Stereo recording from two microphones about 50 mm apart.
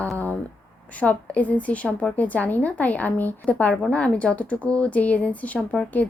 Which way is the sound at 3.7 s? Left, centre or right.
Centre.